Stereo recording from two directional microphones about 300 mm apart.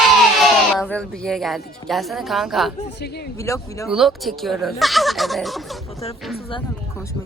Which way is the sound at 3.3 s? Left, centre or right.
Centre.